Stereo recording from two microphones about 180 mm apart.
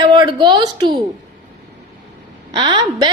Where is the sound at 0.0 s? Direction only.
25° right (ahead or behind).